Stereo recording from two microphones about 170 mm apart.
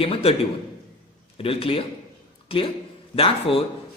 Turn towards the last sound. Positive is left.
turn(degrees=35)  # may be behind; listen again after turning